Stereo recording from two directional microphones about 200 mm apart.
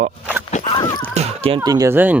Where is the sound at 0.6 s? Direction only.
20° left (ahead or behind).